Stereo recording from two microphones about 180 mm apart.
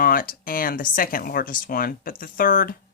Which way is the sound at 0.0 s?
55° left (ahead or behind).